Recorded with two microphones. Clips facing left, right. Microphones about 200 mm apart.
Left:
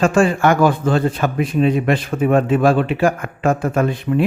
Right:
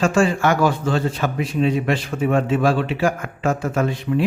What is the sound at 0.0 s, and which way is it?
A man's voice, 55° left (ahead or behind).